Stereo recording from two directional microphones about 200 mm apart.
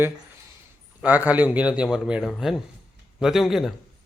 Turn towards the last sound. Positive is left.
turn(degrees=0)  # may be behind; listen again after turning